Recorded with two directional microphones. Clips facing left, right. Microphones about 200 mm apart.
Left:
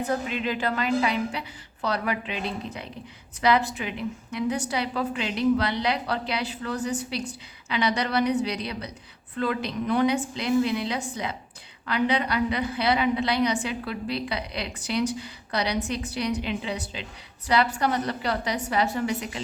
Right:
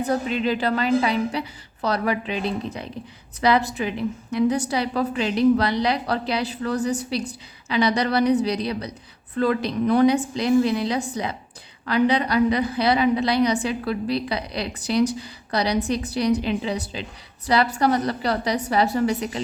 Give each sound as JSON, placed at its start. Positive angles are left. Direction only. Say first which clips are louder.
{"t": 0.1, "sound": "a woman's voice", "louder": "right 7 dB", "side_deg": -35}